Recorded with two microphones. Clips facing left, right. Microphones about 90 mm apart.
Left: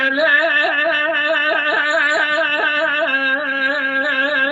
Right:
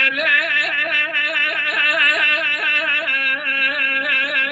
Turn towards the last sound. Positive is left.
turn(degrees=35)  # may be behind; listen again after turning